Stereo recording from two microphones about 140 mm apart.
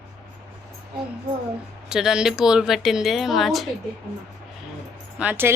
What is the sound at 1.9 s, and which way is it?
A woman's voice, 5° right (ahead or behind).